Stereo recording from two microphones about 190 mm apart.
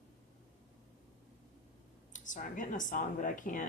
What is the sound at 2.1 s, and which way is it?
Speech, 40° left (ahead or behind).